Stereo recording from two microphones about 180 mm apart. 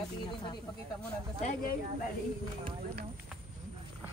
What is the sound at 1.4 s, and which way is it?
Speech, 50° left (ahead or behind).